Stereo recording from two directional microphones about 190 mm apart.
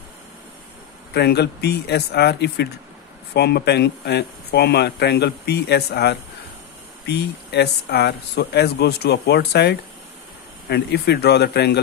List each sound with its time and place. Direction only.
1.1 s speech: 60° left (ahead or behind)